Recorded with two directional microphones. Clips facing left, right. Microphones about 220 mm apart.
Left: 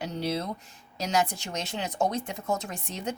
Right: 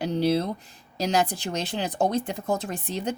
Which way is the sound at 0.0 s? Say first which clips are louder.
Right 7 dB; 35° right (ahead or behind).